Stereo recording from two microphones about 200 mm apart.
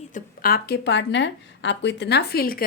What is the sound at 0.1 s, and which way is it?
A woman's voice, 50° left (ahead or behind).